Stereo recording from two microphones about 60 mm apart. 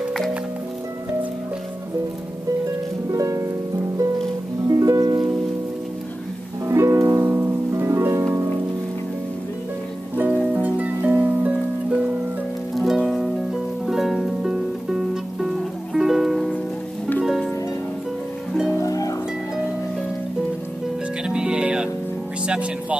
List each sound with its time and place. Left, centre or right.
3.1 s music: right
4.6 s music: right
6.7 s music: right
7.2 s music: right
10.1 s music: right
12.7 s music: centre
17.2 s harp: centre
18.7 s music: left
21.3 s music: centre